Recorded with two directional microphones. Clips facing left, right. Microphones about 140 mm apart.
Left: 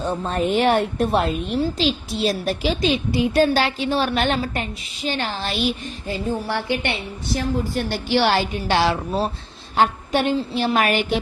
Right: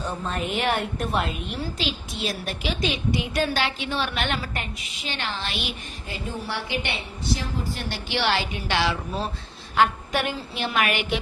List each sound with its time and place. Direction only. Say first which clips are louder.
0.3 s a woman's voice: left 7 dB; 35° left (ahead or behind)
6.5 s a woman's voice: left 6 dB; 55° left (ahead or behind)
9.7 s a woman's voice: left 3 dB; 30° left (ahead or behind)